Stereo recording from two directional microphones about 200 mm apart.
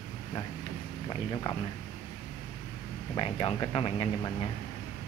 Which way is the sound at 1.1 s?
20° left (ahead or behind).